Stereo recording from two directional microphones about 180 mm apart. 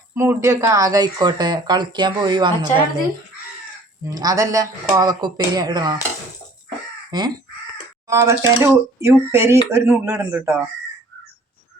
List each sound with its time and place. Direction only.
0.1 s speech: 15° right (ahead or behind)
4.0 s speech: 20° right (ahead or behind)
7.1 s speech: 25° right (ahead or behind)